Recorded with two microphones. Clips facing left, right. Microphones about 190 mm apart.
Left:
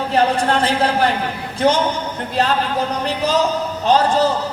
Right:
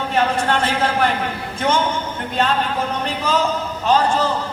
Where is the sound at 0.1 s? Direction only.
35° left (ahead or behind).